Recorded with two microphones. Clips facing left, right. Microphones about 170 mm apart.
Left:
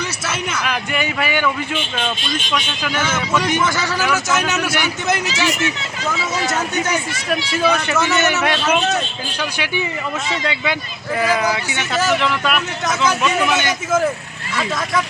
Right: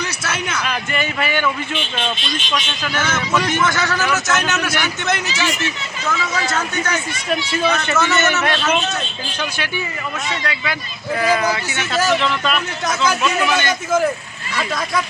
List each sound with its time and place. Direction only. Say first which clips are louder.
0.3 s a man's voice: even; 5° left (ahead or behind); by 10.8 s 20° left (ahead or behind)
11.2 s a man's voice: even; 10° left (ahead or behind)